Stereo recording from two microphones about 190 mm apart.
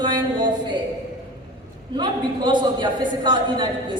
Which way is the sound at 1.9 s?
25° right (ahead or behind).